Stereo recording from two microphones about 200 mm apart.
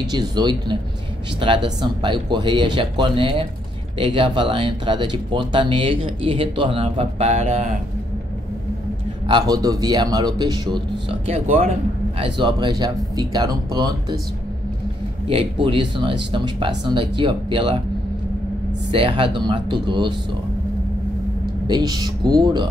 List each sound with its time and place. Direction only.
0.1 s speech: 20° right (ahead or behind)
9.3 s speech: 20° right (ahead or behind)
15.2 s speech: 25° right (ahead or behind)
18.9 s speech: 25° right (ahead or behind)
21.6 s speech: 20° right (ahead or behind)